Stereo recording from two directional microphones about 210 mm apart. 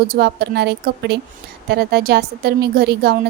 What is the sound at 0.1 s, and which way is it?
A woman's voice, 50° right (ahead or behind).